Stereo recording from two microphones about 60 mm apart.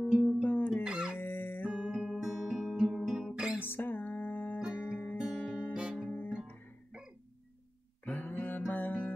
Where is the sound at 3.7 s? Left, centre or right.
Left.